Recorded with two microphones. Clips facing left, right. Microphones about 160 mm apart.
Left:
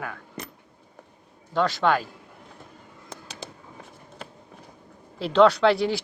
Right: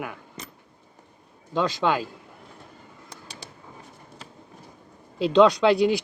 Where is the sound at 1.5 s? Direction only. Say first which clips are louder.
Left 1 dB; 15° right (ahead or behind).